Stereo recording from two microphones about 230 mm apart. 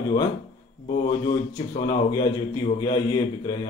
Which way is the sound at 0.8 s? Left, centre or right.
Left.